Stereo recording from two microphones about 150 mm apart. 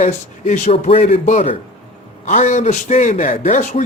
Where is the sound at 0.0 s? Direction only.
50° left (ahead or behind).